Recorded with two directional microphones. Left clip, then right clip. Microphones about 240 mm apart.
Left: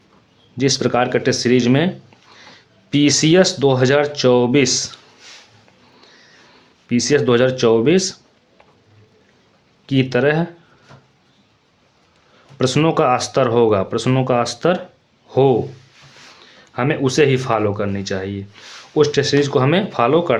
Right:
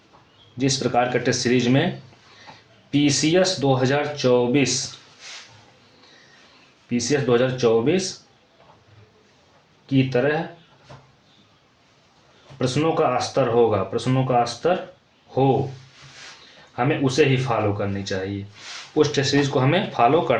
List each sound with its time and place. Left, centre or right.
0.5 s speech: left
2.9 s speech: left
6.8 s speech: left
9.8 s speech: left
12.5 s speech: left
16.7 s speech: left